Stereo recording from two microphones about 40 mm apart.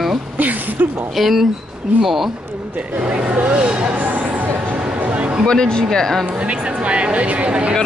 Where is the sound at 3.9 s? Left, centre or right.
Right.